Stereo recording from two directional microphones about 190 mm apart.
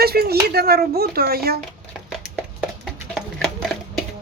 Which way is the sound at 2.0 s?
Centre (ahead or behind).